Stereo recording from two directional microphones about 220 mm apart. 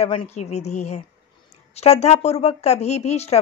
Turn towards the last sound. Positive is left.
turn(degrees=30)  # may be behind; listen again after turning